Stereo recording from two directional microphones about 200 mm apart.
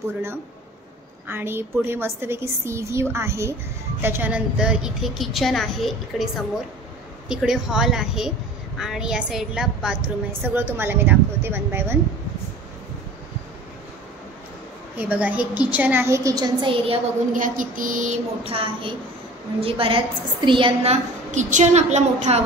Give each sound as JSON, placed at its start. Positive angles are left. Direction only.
{"t": 1.2, "sound": "a woman's voice", "side_deg": -10}
{"t": 15.0, "sound": "a woman's voice", "side_deg": -10}
{"t": 17.3, "sound": "a woman's voice", "side_deg": -40}